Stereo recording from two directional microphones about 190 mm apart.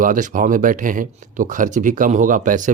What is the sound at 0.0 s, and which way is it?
Speech, 45° right (ahead or behind).